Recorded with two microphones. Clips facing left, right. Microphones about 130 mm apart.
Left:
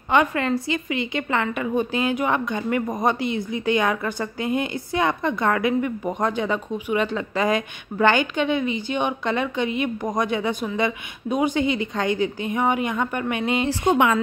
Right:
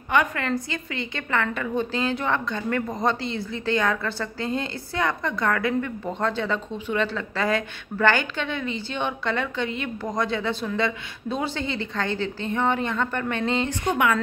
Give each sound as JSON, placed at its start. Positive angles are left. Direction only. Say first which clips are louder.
{"t": 0.1, "sound": "a woman's voice", "louder": "left 3 dB", "side_deg": 25}
{"t": 13.7, "sound": "a woman's voice", "louder": "left 4 dB", "side_deg": 25}